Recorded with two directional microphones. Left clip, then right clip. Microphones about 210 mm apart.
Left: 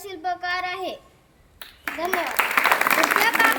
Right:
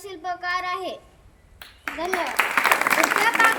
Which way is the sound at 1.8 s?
10° left (ahead or behind).